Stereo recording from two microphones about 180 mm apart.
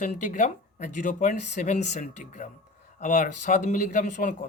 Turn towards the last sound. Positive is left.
turn(degrees=45)  # may be behind; listen again after turning